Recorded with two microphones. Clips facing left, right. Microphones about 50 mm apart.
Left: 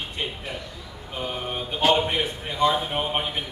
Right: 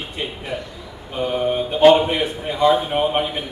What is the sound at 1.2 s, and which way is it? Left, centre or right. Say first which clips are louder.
Speech: right 10 dB; centre.